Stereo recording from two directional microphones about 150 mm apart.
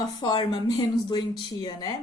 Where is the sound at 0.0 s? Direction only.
30° left (ahead or behind).